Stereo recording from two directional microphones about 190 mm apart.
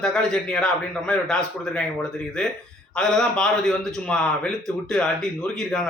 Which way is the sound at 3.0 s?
5° left (ahead or behind).